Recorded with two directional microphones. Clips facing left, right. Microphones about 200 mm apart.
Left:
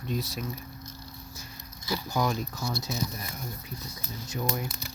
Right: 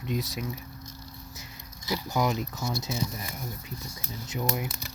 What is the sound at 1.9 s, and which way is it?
Speech, 20° right (ahead or behind).